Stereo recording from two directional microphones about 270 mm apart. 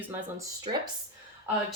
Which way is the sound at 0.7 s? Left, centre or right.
Right.